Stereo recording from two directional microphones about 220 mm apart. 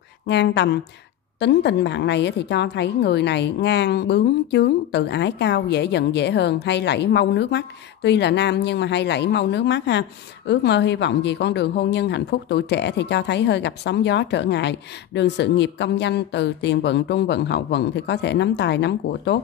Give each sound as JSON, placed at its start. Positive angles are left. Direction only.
{"t": 0.3, "sound": "a woman's voice", "side_deg": 50}